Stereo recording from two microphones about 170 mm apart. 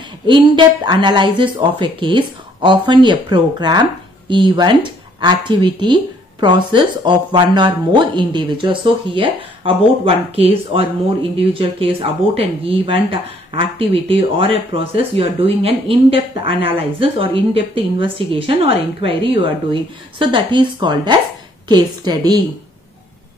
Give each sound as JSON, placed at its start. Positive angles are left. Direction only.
{"t": 0.3, "sound": "speech", "side_deg": -30}